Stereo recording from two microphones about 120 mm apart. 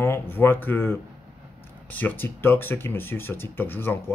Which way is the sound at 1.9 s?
15° left (ahead or behind).